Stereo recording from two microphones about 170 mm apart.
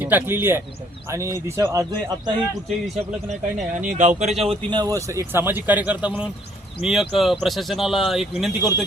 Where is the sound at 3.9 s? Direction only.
45° right (ahead or behind).